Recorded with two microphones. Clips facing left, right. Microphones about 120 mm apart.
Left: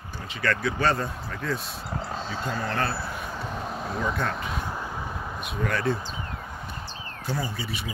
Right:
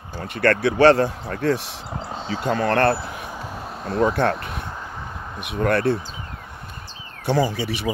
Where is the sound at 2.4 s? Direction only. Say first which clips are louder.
Right 11 dB; 65° right (ahead or behind).